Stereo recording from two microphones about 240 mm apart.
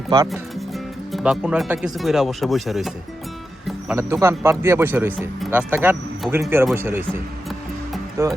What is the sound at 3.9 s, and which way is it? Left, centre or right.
Speech, centre.